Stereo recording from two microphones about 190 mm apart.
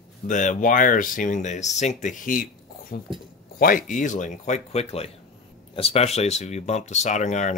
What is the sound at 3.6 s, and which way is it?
Speech, 45° left (ahead or behind).